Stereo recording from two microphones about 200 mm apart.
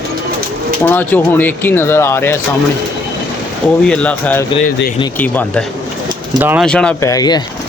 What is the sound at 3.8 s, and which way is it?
Speech, 5° left (ahead or behind).